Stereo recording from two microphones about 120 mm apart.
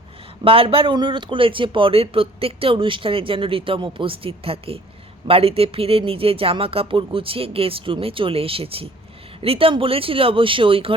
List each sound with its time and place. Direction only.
0.4 s a man's voice: 50° right (ahead or behind)